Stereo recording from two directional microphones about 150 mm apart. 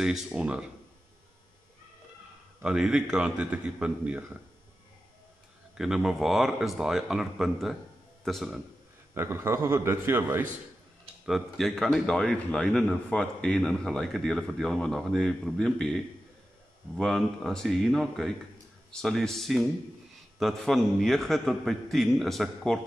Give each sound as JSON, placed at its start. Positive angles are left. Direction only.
{"t": 0.0, "sound": "a man's voice", "side_deg": -5}
{"t": 2.6, "sound": "a man's voice", "side_deg": -5}
{"t": 5.8, "sound": "a man's voice", "side_deg": -5}
{"t": 9.1, "sound": "a man's voice", "side_deg": -15}
{"t": 11.2, "sound": "a man's voice", "side_deg": 0}